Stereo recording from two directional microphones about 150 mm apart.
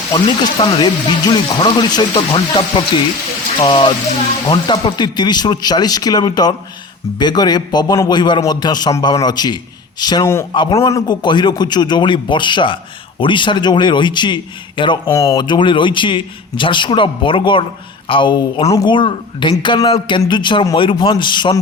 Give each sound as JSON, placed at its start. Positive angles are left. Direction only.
{"t": 0.6, "sound": "a man's voice", "side_deg": 25}
{"t": 15.1, "sound": "a man's voice", "side_deg": 20}